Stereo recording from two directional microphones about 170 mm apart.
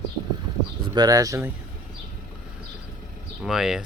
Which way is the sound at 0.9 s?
20° right (ahead or behind).